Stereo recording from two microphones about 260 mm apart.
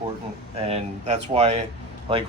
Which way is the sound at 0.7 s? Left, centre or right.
Right.